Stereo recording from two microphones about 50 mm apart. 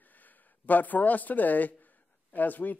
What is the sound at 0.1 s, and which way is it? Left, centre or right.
Speech, left.